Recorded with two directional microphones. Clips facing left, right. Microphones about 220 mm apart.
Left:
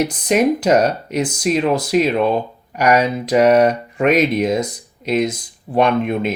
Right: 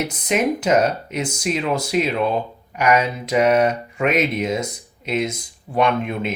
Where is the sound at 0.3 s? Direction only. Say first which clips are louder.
Left 4 dB; 35° left (ahead or behind).